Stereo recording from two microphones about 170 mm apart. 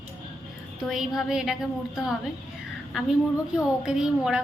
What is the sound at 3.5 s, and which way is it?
Speech, 5° right (ahead or behind).